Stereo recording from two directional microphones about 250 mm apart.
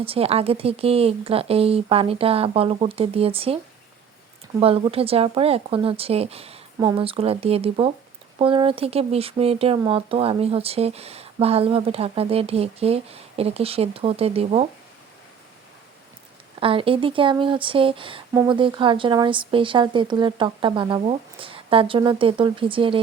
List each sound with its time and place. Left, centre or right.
0.0 s speech: right
4.6 s speech: right
16.6 s speech: right